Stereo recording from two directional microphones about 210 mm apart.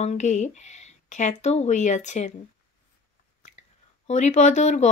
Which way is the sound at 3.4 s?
35° left (ahead or behind).